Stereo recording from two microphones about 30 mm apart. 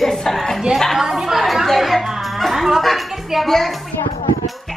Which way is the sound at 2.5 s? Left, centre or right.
Centre.